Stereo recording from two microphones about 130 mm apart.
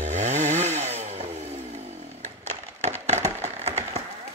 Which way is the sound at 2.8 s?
60° right (ahead or behind).